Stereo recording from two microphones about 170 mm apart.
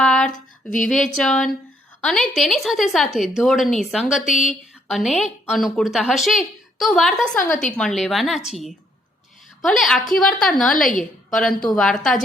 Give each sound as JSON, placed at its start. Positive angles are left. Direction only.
{"t": 0.0, "sound": "a sound", "side_deg": 5}
{"t": 0.3, "sound": "speech", "side_deg": 50}
{"t": 1.0, "sound": "a woman's voice", "side_deg": 0}